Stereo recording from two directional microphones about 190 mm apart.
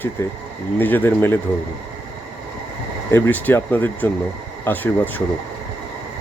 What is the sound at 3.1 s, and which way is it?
Speech, 10° left (ahead or behind).